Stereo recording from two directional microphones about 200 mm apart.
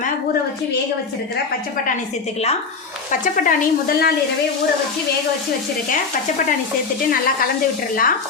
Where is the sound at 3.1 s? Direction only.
40° left (ahead or behind).